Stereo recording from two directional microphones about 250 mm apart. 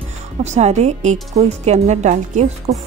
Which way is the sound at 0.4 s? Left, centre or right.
Right.